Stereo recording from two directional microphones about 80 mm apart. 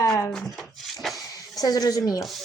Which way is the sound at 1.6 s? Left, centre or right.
Left.